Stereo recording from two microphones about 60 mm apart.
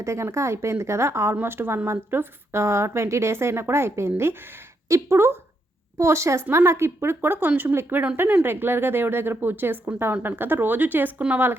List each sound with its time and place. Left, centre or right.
0.0 s a woman's voice: right
1.4 s a woman's voice: right
6.0 s a woman's voice: right